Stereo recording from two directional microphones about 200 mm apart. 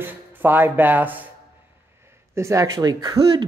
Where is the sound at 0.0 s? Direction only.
10° right (ahead or behind).